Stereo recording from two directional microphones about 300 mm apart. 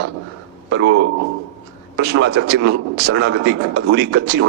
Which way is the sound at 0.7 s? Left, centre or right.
Right.